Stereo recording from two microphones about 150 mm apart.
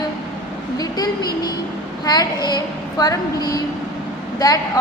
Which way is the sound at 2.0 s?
25° left (ahead or behind).